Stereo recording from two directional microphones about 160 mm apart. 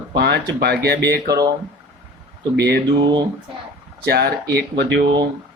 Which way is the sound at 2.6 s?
90° right.